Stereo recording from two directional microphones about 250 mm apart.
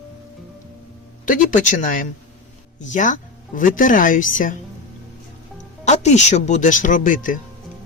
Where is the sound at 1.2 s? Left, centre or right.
Left.